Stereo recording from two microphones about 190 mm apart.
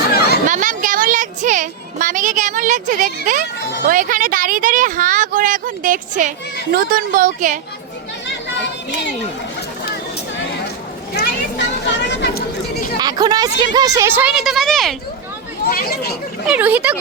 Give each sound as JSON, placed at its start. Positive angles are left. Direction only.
{"t": 0.1, "sound": "a sound", "side_deg": 55}
{"t": 0.4, "sound": "a sound", "side_deg": -40}
{"t": 3.8, "sound": "speech", "side_deg": -45}
{"t": 11.1, "sound": "children playing", "side_deg": 65}
{"t": 13.0, "sound": "a woman's voice", "side_deg": -20}
{"t": 15.6, "sound": "speech", "side_deg": 55}
{"t": 16.5, "sound": "speech", "side_deg": -10}